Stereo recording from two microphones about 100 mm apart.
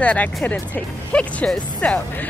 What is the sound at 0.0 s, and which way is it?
Speech, 10° left (ahead or behind).